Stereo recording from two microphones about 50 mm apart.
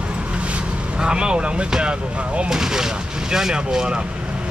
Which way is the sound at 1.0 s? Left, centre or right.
Centre.